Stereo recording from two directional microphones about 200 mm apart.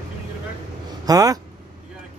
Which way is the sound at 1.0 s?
20° right (ahead or behind).